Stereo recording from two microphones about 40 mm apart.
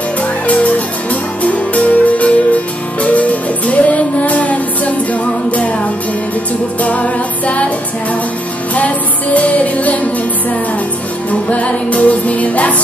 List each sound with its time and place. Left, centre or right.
0.5 s music: left
6.8 s music: left
8.7 s music: left
11.4 s music: left